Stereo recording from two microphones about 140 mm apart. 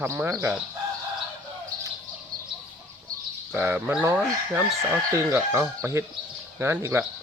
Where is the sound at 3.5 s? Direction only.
15° right (ahead or behind).